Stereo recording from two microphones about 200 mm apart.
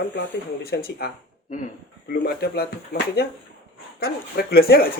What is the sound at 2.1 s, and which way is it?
Speech, 55° left (ahead or behind).